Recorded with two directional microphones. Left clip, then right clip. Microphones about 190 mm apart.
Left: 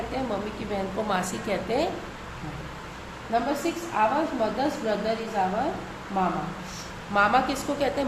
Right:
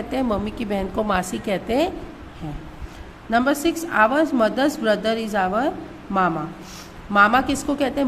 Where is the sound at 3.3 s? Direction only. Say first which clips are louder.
Right 6 dB; 45° right (ahead or behind).